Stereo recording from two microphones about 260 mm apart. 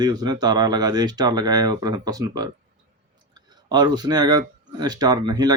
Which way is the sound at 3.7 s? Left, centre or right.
Centre.